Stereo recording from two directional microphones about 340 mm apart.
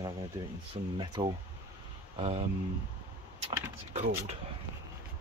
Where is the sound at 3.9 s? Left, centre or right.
Centre.